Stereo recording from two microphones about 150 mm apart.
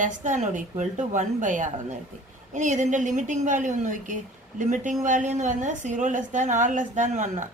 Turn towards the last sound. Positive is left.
turn(degrees=-55)  # may be behind; listen again after turning